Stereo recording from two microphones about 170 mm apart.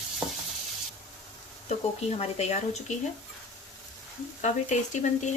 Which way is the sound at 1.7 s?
40° left (ahead or behind).